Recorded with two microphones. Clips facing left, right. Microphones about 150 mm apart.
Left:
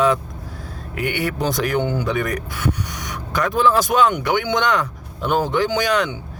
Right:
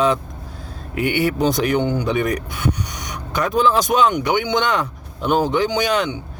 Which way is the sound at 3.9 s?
5° right (ahead or behind).